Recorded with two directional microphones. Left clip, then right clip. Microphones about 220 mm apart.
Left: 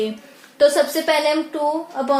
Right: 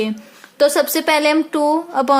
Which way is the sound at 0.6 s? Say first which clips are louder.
Right 1 dB; 35° right (ahead or behind).